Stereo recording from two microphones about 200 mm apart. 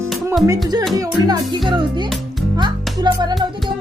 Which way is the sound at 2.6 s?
20° right (ahead or behind).